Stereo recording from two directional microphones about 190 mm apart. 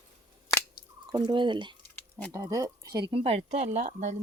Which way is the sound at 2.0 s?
10° left (ahead or behind).